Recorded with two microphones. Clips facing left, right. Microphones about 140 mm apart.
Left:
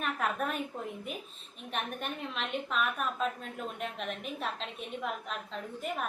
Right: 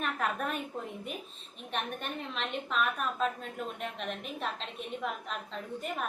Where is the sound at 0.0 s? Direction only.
Centre (ahead or behind).